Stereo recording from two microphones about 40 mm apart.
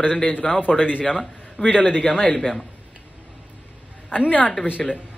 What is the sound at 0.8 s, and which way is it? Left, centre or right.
Speech, left.